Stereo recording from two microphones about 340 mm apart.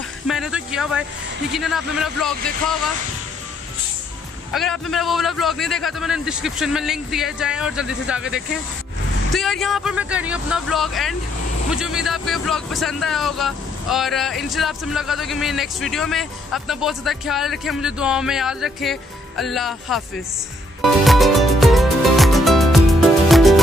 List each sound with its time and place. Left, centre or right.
0.3 s speech: centre
4.5 s speech: centre
20.8 s music: centre